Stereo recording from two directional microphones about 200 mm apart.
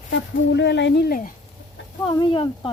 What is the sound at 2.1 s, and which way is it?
Speech, 25° left (ahead or behind).